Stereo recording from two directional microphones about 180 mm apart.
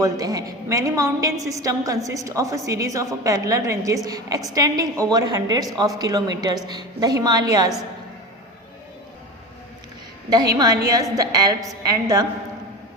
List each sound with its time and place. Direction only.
0.0 s a woman's voice: 20° right (ahead or behind)
10.5 s a woman's voice: 20° right (ahead or behind)